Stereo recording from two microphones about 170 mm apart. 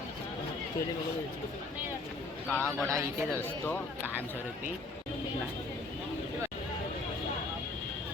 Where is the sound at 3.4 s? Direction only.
10° left (ahead or behind).